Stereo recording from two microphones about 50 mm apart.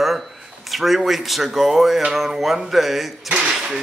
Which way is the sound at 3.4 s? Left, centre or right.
Centre.